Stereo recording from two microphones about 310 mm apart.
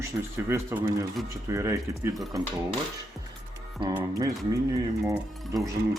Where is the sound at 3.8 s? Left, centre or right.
Centre.